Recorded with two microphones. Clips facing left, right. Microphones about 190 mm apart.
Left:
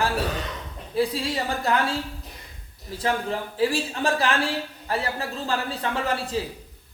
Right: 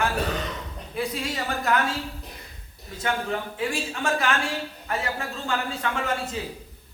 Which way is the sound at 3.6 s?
35° left (ahead or behind).